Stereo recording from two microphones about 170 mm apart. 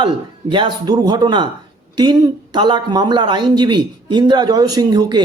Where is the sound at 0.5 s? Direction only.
25° right (ahead or behind).